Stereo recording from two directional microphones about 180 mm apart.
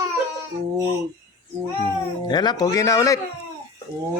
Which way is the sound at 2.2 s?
25° left (ahead or behind).